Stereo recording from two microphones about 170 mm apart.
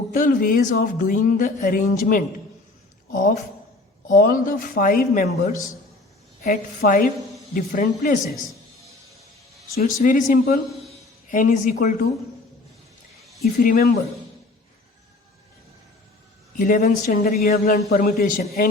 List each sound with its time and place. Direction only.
0.1 s speech: 50° left (ahead or behind)
9.7 s speech: 45° left (ahead or behind)
13.4 s speech: 55° left (ahead or behind)
16.6 s speech: 50° left (ahead or behind)
17.4 s a man's voice: 60° left (ahead or behind)